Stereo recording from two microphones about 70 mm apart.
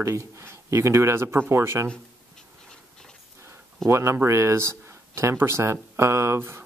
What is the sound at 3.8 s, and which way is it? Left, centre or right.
Speech, right.